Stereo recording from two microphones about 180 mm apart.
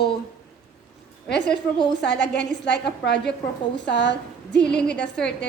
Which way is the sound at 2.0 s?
70° left (ahead or behind).